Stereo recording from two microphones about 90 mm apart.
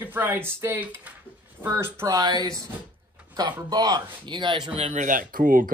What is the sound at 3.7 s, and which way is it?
Speech, 45° right (ahead or behind).